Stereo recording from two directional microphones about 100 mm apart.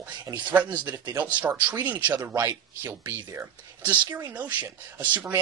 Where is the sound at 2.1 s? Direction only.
30° right (ahead or behind).